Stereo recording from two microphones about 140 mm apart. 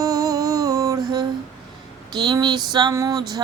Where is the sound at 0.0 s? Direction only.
25° right (ahead or behind).